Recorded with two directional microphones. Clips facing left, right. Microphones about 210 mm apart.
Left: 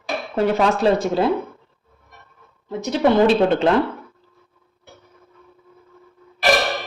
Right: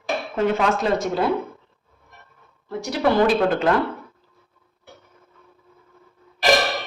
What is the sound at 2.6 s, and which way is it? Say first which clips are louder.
A woman's voice: left 3 dB; 20° left (ahead or behind).